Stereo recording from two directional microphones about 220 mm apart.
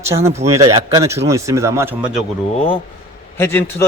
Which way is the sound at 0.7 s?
15° right (ahead or behind).